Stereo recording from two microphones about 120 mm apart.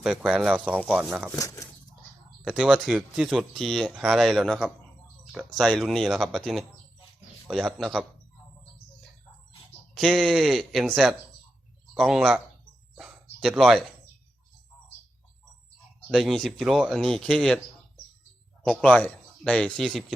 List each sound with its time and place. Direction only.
0.0 s speech: 5° right (ahead or behind)
1.3 s speech: 25° left (ahead or behind)
2.4 s speech: 5° right (ahead or behind)
9.9 s speech: centre (ahead or behind)
13.0 s a sound: 5° right (ahead or behind)
16.1 s speech: centre (ahead or behind)
18.7 s speech: 10° left (ahead or behind)